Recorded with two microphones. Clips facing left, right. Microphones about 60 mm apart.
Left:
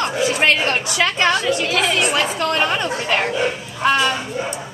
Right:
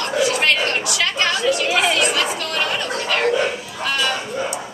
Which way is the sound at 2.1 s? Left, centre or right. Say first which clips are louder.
Left 3 dB; left.